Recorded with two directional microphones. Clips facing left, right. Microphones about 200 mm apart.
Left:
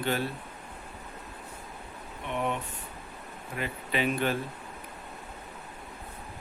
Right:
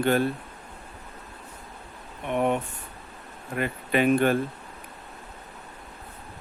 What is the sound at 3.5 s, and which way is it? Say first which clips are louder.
Speech: right 7 dB; 55° right (ahead or behind).